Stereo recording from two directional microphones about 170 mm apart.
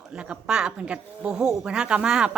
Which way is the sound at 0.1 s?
5° right (ahead or behind).